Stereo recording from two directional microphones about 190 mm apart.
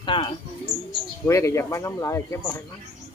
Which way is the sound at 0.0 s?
25° left (ahead or behind).